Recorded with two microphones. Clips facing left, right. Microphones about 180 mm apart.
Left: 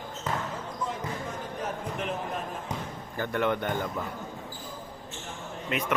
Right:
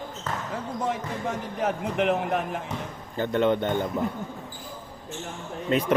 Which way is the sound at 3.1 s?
20° right (ahead or behind).